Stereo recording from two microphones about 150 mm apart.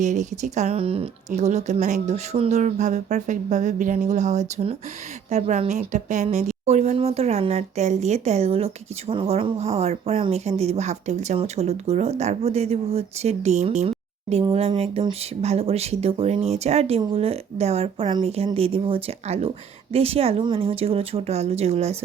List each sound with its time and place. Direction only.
0.0 s speech: 55° right (ahead or behind)